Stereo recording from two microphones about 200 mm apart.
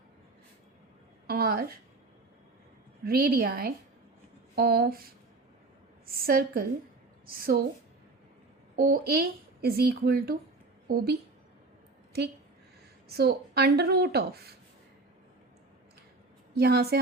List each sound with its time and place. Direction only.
1.3 s a sound: 50° right (ahead or behind)
3.0 s a woman's voice: 50° right (ahead or behind)
8.7 s a woman's voice: 45° right (ahead or behind)
13.1 s a woman's voice: 55° right (ahead or behind)
16.6 s a woman's voice: 50° right (ahead or behind)